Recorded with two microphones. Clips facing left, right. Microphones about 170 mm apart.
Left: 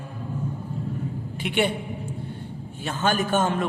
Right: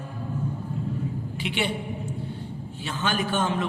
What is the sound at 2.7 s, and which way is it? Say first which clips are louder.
Speech: left 4 dB; 50° left (ahead or behind).